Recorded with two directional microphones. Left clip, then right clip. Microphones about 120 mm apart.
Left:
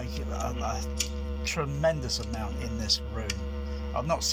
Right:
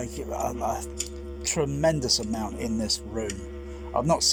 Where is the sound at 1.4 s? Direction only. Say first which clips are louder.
Right 3 dB; 55° right (ahead or behind).